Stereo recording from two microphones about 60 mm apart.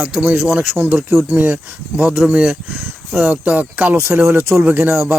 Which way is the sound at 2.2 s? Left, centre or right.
Centre.